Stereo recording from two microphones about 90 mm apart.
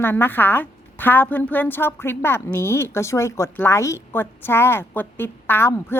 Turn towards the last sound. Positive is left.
turn(degrees=25)  # may be behind; listen again after turning